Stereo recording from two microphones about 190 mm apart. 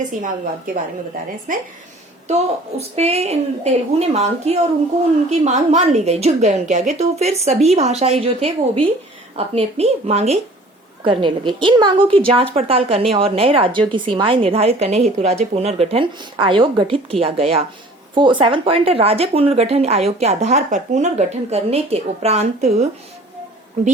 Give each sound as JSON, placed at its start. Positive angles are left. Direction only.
{"t": 1.5, "sound": "a woman's voice", "side_deg": -45}
{"t": 2.2, "sound": "a woman's voice", "side_deg": -35}